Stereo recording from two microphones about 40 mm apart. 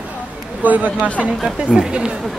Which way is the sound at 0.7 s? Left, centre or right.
Right.